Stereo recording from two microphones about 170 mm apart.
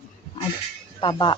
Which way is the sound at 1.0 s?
30° left (ahead or behind).